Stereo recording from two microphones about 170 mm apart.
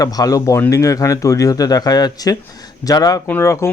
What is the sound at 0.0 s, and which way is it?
Speech, 20° left (ahead or behind).